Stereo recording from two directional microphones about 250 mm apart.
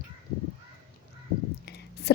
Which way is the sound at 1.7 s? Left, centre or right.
Left.